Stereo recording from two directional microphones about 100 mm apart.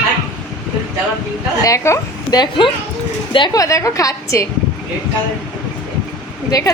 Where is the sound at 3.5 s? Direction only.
35° left (ahead or behind).